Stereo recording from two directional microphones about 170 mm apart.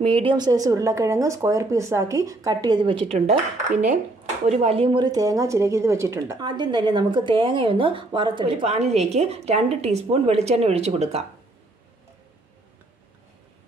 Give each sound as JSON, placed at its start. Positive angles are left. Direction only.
{"t": 0.0, "sound": "a woman's voice", "side_deg": -30}
{"t": 3.1, "sound": "a woman's voice", "side_deg": -40}
{"t": 3.7, "sound": "speech", "side_deg": -10}
{"t": 4.5, "sound": "a woman's voice", "side_deg": -40}